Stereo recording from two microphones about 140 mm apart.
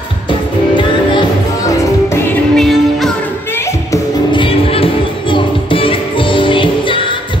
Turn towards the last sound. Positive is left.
turn(degrees=35)  # may be behind; listen again after turning